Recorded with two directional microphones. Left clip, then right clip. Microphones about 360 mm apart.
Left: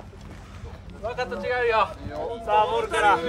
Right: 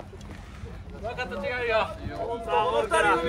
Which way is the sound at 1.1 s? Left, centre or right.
Centre.